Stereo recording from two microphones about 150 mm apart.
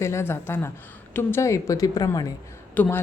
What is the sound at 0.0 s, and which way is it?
A woman's voice, 20° left (ahead or behind).